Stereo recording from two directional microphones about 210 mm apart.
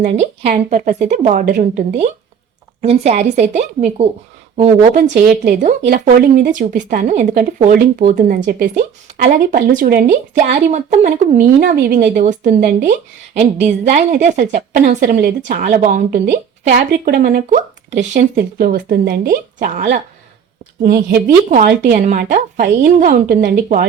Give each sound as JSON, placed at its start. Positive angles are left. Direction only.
{"t": 0.0, "sound": "a woman's voice", "side_deg": -35}
{"t": 2.8, "sound": "a woman's voice", "side_deg": -30}
{"t": 5.0, "sound": "a woman's voice", "side_deg": -50}